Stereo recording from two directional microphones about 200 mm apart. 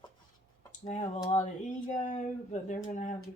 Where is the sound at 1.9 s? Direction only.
35° left (ahead or behind).